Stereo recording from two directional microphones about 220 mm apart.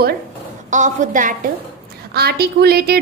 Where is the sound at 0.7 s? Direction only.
35° right (ahead or behind).